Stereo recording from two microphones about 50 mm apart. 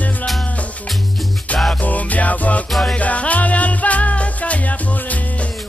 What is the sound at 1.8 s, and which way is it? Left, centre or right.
Music, left.